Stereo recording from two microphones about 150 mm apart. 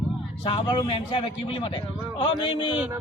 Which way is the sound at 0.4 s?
35° left (ahead or behind).